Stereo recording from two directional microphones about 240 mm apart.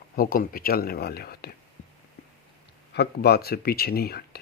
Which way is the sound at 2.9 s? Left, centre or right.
Left.